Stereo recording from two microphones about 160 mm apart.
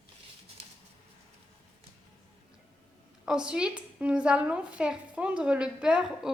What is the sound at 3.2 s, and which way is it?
A woman's voice, 5° right (ahead or behind).